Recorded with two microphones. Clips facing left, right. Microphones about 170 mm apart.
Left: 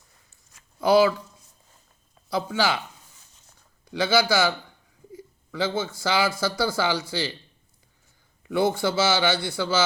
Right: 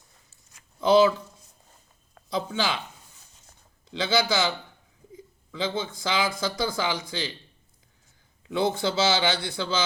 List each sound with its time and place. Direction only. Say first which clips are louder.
0.8 s a man's voice: even; 20° right (ahead or behind)
2.3 s a man's voice: left 3 dB; 20° right (ahead or behind)
3.8 s a man's voice: left 3 dB; 20° right (ahead or behind)
8.5 s a man's voice: left 2 dB; 20° right (ahead or behind)